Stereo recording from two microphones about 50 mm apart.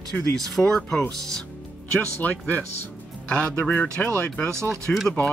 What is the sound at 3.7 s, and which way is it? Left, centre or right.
Speech, left.